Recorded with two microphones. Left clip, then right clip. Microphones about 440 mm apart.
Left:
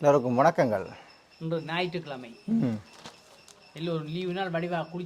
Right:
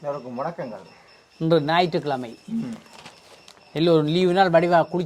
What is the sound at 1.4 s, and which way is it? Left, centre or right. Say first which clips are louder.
Speech: right 11 dB; right.